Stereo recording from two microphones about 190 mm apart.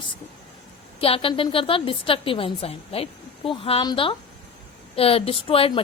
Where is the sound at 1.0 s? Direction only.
30° left (ahead or behind).